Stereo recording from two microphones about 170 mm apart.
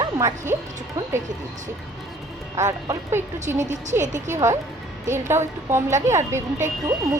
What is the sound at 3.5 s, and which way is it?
Speech, 45° right (ahead or behind).